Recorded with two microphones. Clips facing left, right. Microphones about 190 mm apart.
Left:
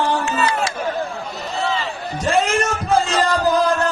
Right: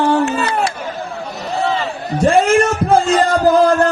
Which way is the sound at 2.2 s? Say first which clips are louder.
Right 7 dB; 55° right (ahead or behind).